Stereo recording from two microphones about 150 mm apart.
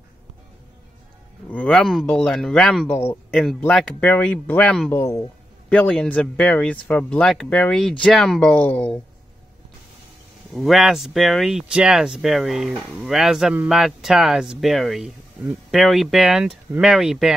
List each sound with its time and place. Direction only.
1.5 s speech: 5° left (ahead or behind)
2.9 s speech: 15° left (ahead or behind)
3.3 s speech: 5° left (ahead or behind)
4.9 s speech: 20° left (ahead or behind)
5.7 s speech: 5° left (ahead or behind)
10.5 s speech: centre (ahead or behind)